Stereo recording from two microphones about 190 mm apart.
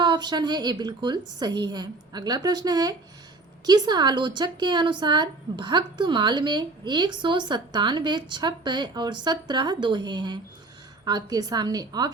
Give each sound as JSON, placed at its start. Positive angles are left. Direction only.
{"t": 0.0, "sound": "a woman's voice", "side_deg": -25}